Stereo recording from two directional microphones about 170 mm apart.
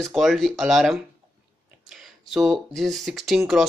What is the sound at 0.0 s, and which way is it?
Speech, centre (ahead or behind).